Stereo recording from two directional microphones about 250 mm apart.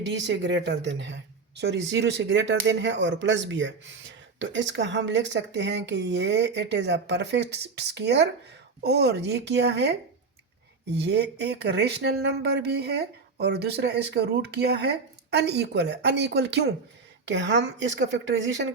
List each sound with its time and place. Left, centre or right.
0.0 s speech: right
10.9 s speech: right